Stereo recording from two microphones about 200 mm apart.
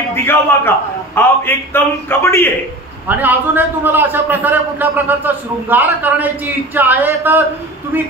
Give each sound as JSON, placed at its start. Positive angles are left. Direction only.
{"t": 0.1, "sound": "a man's voice", "side_deg": 10}
{"t": 3.1, "sound": "a man's voice", "side_deg": -10}